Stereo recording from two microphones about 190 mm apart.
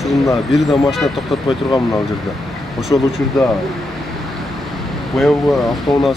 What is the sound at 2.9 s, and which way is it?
Speech, 20° left (ahead or behind).